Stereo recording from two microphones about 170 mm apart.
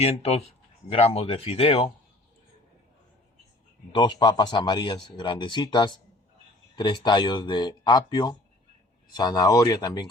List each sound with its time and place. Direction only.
0.0 s speech: 35° left (ahead or behind)
3.9 s speech: 25° left (ahead or behind)